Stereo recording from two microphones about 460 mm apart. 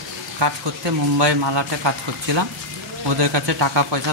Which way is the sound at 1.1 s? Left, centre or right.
Right.